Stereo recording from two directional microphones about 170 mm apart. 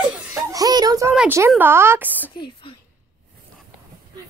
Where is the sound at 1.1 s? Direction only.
10° right (ahead or behind).